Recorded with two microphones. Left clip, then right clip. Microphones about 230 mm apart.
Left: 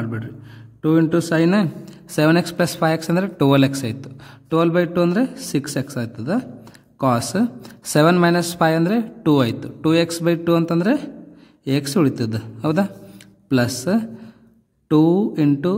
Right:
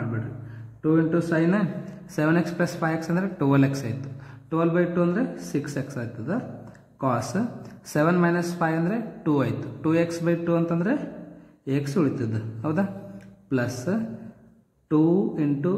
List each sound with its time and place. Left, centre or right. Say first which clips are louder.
0.8 s a man's voice: left 5 dB; left
5.5 s speech: left 6 dB; left
12.2 s a man's voice: left 6 dB; left
13.5 s speech: left 7 dB; left